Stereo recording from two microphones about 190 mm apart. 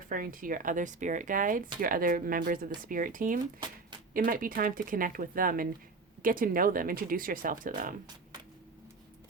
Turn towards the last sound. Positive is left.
turn(degrees=-45)  # may be behind; listen again after turning